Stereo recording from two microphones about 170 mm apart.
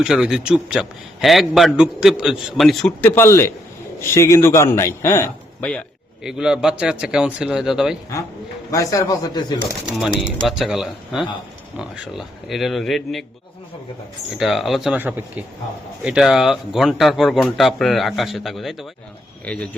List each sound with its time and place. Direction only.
0.0 s a man's voice: 5° right (ahead or behind)
6.2 s a man's voice: 5° right (ahead or behind)
8.7 s speech: 20° left (ahead or behind)
10.2 s a man's voice: centre (ahead or behind)
14.3 s a man's voice: centre (ahead or behind)